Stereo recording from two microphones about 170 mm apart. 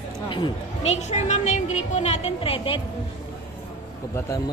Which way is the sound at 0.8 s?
40° left (ahead or behind).